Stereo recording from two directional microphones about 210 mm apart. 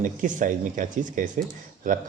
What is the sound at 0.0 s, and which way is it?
A man's voice, 40° right (ahead or behind).